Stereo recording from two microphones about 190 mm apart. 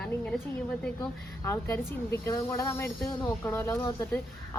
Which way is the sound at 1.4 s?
15° left (ahead or behind).